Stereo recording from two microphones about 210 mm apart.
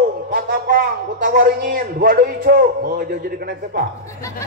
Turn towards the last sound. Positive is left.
turn(degrees=-45)  # may be behind; listen again after turning